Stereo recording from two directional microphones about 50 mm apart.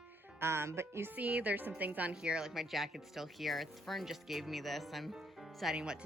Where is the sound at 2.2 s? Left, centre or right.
Centre.